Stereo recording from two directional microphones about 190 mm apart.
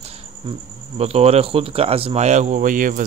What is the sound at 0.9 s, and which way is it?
Speech, 35° right (ahead or behind).